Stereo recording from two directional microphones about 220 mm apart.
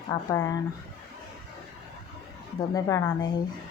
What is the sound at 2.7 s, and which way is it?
Speech, 15° left (ahead or behind).